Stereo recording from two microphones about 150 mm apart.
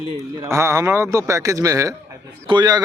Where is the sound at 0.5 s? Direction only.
20° right (ahead or behind).